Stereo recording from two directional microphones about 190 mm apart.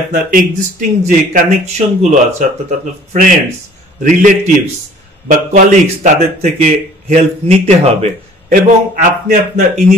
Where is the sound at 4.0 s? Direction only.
40° right (ahead or behind).